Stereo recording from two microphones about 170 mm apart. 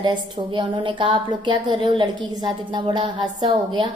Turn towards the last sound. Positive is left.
turn(degrees=-25)  # may be behind; listen again after turning